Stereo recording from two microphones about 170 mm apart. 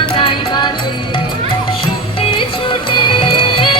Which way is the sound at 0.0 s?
30° left (ahead or behind).